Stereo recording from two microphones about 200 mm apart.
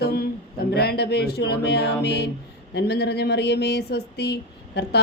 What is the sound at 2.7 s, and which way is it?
Speech, 55° left (ahead or behind).